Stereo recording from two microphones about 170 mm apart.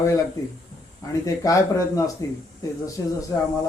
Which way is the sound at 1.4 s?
20° left (ahead or behind).